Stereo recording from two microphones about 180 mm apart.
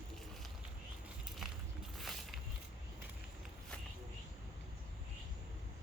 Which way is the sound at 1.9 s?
Centre (ahead or behind).